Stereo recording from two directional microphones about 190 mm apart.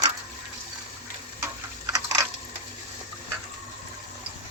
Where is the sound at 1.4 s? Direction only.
15° right (ahead or behind).